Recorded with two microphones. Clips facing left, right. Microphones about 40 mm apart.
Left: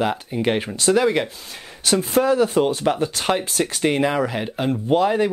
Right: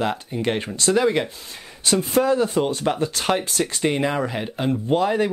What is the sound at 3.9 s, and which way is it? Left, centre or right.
Speech, centre.